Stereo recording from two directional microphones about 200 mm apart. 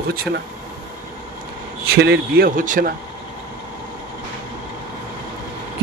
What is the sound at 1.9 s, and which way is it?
A man's voice, 50° right (ahead or behind).